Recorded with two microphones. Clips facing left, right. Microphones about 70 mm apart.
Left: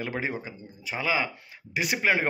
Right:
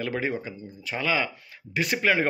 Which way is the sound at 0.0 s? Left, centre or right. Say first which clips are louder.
Right 3 dB; centre.